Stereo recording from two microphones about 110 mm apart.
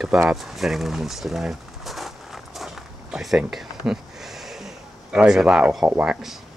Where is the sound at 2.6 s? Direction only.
Centre (ahead or behind).